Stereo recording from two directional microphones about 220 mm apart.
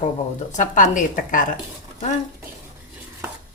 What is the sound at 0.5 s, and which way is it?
A woman's voice, 35° left (ahead or behind).